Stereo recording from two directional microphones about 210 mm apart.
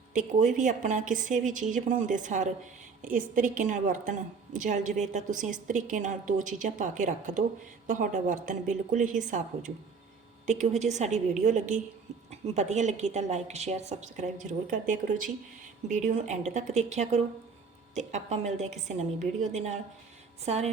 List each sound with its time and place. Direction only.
0.1 s a woman's voice: 35° right (ahead or behind)